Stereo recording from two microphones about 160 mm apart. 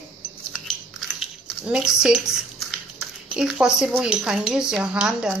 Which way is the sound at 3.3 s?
5° right (ahead or behind).